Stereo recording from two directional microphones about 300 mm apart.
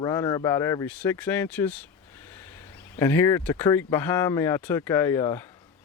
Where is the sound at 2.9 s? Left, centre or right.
Centre.